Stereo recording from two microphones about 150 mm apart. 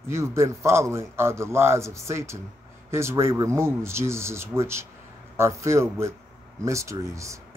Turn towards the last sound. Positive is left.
turn(degrees=-20)  # may be behind; listen again after turning